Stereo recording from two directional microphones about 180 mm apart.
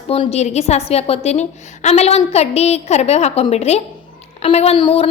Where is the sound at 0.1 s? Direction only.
35° left (ahead or behind).